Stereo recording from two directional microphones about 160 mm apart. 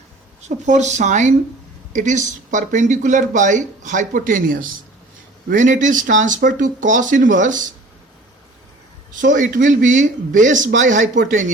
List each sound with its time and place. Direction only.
0.4 s speech: 45° right (ahead or behind)
9.2 s speech: 55° right (ahead or behind)